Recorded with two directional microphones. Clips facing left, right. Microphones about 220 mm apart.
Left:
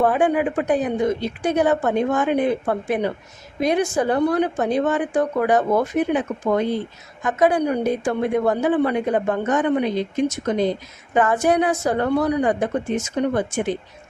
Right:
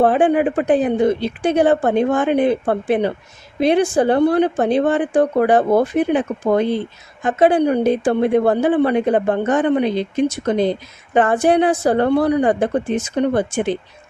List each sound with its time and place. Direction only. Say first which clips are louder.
0.0 s speech: right 4 dB; 30° right (ahead or behind)